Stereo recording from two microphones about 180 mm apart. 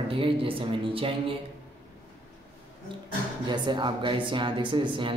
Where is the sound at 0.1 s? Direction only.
30° right (ahead or behind).